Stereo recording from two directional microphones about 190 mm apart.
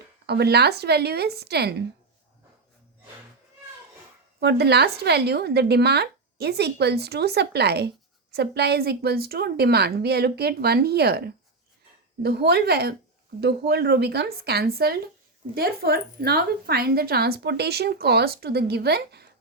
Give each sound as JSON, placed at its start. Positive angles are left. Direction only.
{"t": 0.3, "sound": "a woman's voice", "side_deg": -60}
{"t": 4.4, "sound": "a woman's voice", "side_deg": -60}